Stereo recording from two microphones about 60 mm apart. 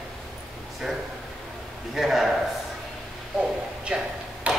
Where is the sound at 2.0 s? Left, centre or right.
Centre.